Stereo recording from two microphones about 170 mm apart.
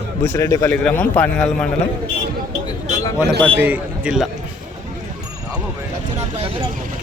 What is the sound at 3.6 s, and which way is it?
Speech, 10° right (ahead or behind).